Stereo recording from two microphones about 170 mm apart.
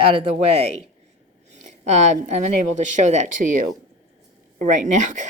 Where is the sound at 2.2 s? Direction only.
45° right (ahead or behind).